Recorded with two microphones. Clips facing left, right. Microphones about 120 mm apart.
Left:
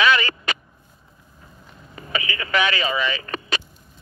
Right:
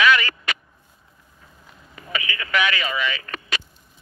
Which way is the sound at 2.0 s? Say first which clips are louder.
Left 2 dB; 30° left (ahead or behind).